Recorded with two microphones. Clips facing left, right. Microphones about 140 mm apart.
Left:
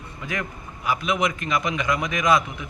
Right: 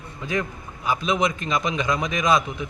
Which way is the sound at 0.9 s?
25° right (ahead or behind).